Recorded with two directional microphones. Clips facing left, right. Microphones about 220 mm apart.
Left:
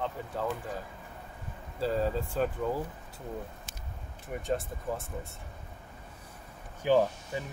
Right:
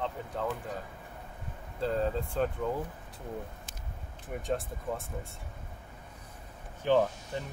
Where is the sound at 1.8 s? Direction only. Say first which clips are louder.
Left 1 dB; 5° left (ahead or behind).